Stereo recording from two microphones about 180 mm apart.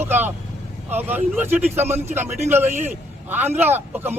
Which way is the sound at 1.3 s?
10° right (ahead or behind).